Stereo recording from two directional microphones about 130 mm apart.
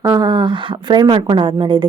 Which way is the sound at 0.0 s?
30° right (ahead or behind).